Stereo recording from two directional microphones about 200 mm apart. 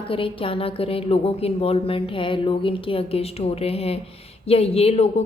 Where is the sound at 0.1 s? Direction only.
25° left (ahead or behind).